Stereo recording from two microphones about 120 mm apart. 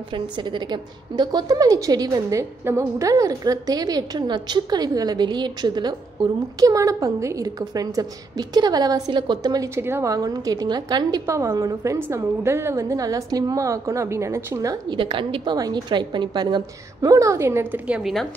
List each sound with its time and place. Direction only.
0.1 s a woman's voice: 40° right (ahead or behind)
9.8 s a woman's voice: 20° right (ahead or behind)
15.0 s a woman's voice: 45° right (ahead or behind)
15.5 s a woman's voice: 35° right (ahead or behind); by 18.1 s 10° right (ahead or behind)